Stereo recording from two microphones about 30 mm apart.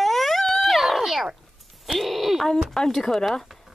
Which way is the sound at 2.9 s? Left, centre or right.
Centre.